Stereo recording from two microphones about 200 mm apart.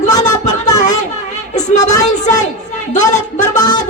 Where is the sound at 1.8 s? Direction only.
15° left (ahead or behind).